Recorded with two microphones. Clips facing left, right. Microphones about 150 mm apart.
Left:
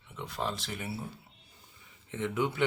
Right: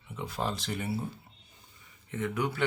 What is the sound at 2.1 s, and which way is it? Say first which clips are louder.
Speech: even; 20° left (ahead or behind).